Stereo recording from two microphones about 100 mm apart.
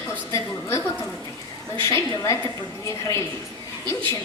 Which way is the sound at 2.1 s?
40° left (ahead or behind).